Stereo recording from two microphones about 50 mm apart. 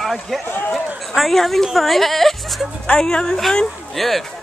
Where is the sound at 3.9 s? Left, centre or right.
Centre.